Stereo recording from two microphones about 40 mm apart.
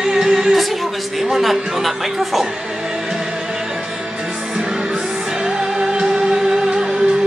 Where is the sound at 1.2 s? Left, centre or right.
Centre.